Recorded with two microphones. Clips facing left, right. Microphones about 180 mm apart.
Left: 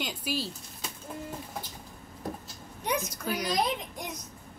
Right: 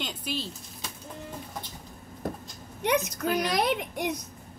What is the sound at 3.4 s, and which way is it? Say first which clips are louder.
Speech: right 3 dB; 70° right (ahead or behind).